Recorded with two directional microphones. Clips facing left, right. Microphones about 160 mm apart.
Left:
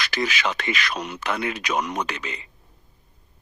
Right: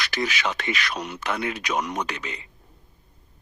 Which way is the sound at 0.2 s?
90° left.